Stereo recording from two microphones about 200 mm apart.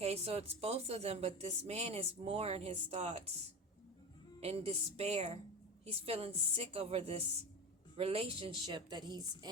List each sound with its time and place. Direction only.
0.0 s a woman's voice: 30° right (ahead or behind)
4.4 s a woman's voice: 30° right (ahead or behind)